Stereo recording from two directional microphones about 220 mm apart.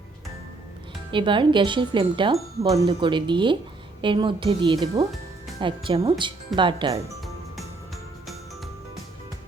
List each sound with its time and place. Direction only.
1.1 s speech: 20° right (ahead or behind)